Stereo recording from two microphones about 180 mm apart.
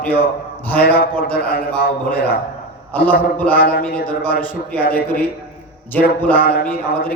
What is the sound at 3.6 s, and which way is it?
Speech, 55° left (ahead or behind).